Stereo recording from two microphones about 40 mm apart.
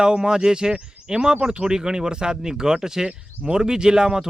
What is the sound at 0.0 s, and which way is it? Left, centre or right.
Speech, centre.